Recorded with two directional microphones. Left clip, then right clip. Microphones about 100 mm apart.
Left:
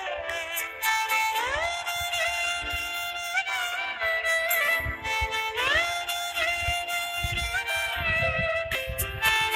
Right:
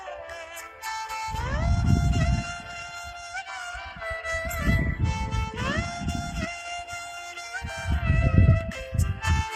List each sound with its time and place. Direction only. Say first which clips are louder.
0.9 s music: left 7 dB; 20° left (ahead or behind)
4.0 s music: left 5 dB; 20° left (ahead or behind)
7.5 s music: left 5 dB; 20° left (ahead or behind)